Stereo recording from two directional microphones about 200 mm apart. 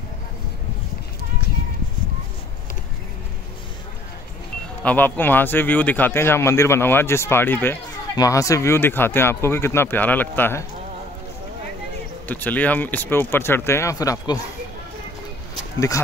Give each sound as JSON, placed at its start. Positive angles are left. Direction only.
{"t": 4.8, "sound": "speech", "side_deg": 10}
{"t": 12.3, "sound": "speech", "side_deg": 10}